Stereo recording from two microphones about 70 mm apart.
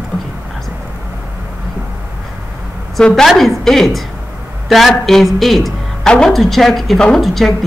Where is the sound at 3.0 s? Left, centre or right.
Centre.